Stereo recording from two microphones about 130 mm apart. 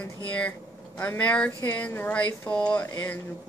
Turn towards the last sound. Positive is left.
turn(degrees=15)  # may be behind; listen again after turning